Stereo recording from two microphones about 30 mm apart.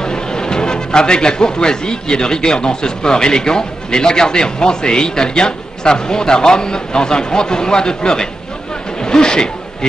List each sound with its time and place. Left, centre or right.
0.0 s a man's voice: left
9.0 s snake: left